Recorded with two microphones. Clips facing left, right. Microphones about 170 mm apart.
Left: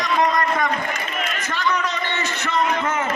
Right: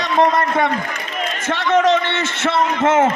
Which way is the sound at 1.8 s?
85° right.